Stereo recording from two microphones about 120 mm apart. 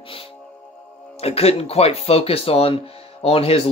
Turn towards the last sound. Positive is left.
turn(degrees=50)  # may be behind; listen again after turning